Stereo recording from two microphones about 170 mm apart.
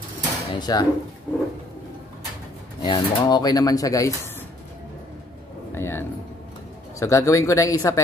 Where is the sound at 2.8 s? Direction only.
25° left (ahead or behind).